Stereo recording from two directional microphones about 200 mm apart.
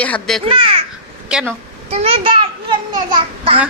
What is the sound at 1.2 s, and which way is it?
Speech, 5° right (ahead or behind).